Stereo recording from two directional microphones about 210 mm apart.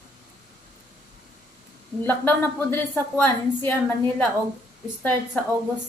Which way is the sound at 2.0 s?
10° left (ahead or behind).